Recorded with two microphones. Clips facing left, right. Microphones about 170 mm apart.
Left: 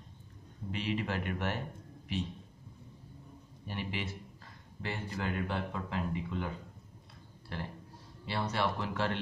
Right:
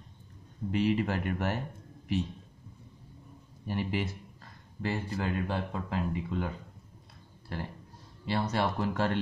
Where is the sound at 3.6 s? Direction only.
40° right (ahead or behind).